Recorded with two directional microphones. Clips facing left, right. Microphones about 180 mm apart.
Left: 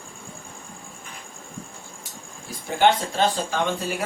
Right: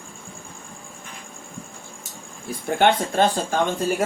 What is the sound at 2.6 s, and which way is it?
Speech, 55° right (ahead or behind).